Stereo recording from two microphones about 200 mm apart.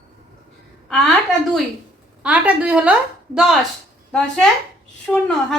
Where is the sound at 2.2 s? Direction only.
5° right (ahead or behind).